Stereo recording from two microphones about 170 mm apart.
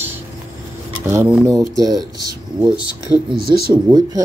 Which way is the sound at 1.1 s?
10° right (ahead or behind).